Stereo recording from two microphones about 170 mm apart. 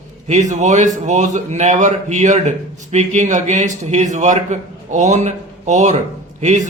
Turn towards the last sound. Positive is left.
turn(degrees=-45)  # may be behind; listen again after turning